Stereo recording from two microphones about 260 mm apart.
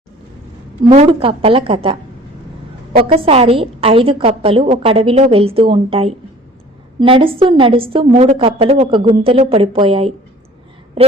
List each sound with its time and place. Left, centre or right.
0.9 s a woman's voice: right